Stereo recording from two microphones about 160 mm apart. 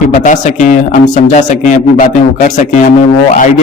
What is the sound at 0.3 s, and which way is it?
A man's voice, 50° left (ahead or behind).